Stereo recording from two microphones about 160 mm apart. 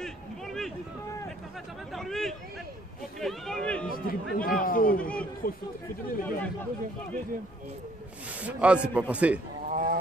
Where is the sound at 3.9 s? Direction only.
60° left (ahead or behind).